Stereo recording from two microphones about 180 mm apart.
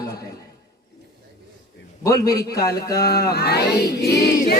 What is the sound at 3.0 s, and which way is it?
Speech, 65° left (ahead or behind).